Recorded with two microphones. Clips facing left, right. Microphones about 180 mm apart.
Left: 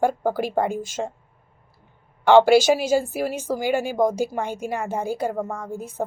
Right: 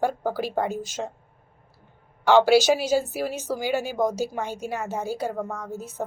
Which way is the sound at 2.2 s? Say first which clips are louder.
Left 3 dB; 55° left (ahead or behind).